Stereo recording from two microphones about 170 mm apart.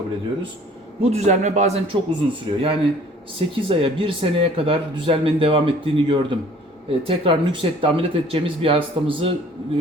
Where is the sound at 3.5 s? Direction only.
30° right (ahead or behind).